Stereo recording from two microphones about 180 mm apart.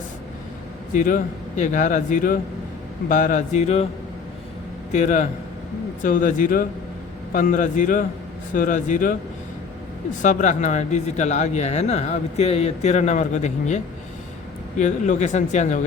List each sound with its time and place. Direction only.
0.9 s a man's voice: 45° left (ahead or behind)
4.9 s a man's voice: 40° left (ahead or behind)
10.2 s speech: 45° left (ahead or behind)